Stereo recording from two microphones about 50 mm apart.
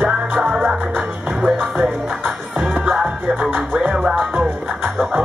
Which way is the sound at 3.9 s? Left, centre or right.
Centre.